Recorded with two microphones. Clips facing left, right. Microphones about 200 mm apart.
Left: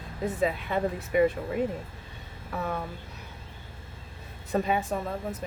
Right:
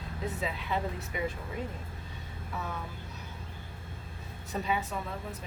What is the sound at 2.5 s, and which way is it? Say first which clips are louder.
Speech: left 6 dB; 65° left (ahead or behind).